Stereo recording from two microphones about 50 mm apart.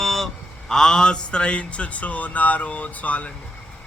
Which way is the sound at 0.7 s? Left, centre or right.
Centre.